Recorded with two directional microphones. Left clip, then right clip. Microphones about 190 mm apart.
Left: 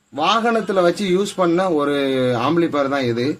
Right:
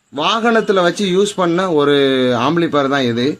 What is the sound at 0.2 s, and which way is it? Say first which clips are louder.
Speech: right 3 dB; 50° right (ahead or behind).